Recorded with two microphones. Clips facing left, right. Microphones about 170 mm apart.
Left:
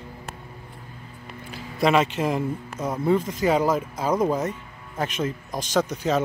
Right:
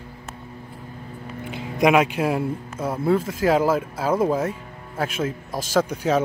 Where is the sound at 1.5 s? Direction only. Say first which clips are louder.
Right 3 dB; 15° right (ahead or behind).